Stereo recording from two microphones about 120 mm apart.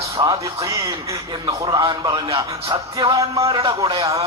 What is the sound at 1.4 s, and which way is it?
Speech, 40° right (ahead or behind).